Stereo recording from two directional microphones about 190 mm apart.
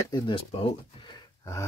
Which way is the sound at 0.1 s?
25° left (ahead or behind).